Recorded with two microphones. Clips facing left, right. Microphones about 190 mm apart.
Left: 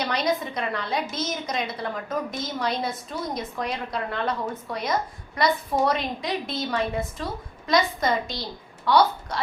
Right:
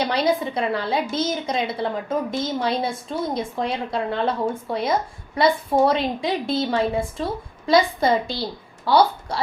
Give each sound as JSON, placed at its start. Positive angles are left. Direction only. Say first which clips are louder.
{"t": 0.0, "sound": "a woman's voice", "louder": "right 4 dB", "side_deg": -30}